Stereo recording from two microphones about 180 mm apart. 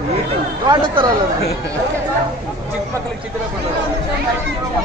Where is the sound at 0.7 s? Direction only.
25° right (ahead or behind).